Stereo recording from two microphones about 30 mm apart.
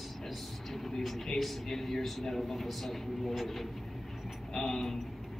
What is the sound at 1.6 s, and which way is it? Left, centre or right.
Speech, centre.